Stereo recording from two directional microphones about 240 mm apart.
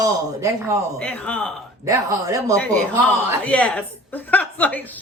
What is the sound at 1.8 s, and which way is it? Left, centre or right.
Speech, centre.